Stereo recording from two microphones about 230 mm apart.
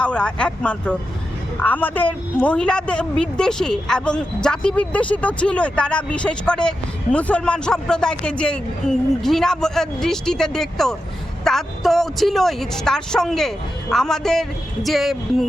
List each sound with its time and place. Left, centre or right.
0.0 s speech: centre